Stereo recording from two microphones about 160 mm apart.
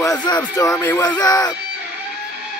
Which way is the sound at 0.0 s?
25° left (ahead or behind).